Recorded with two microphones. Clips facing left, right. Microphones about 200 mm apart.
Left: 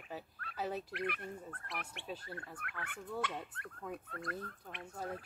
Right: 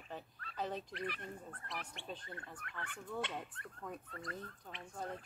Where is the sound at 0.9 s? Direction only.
60° left (ahead or behind).